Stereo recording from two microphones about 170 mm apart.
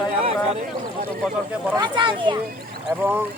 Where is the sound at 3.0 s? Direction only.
10° right (ahead or behind).